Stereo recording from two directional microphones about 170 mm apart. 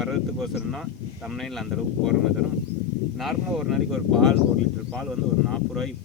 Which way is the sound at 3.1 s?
Centre (ahead or behind).